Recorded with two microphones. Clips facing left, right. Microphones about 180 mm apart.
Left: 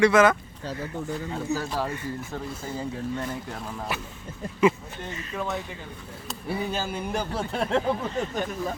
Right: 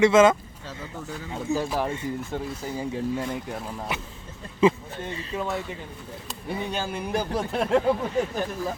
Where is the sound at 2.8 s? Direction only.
10° right (ahead or behind).